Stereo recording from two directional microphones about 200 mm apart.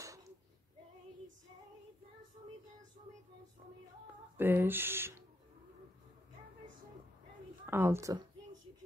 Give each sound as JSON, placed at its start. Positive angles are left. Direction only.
{"t": 0.0, "sound": "a sound", "side_deg": -15}
{"t": 4.4, "sound": "speech", "side_deg": -10}
{"t": 7.6, "sound": "a woman's voice", "side_deg": -10}